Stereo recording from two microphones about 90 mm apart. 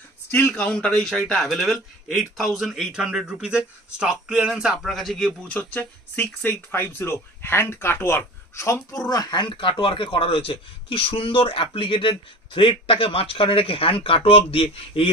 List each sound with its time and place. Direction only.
0.3 s speech: 20° left (ahead or behind)
0.7 s a man's voice: 10° left (ahead or behind)
5.5 s speech: 20° left (ahead or behind)
9.1 s speech: 50° left (ahead or behind); by 15.0 s 90° left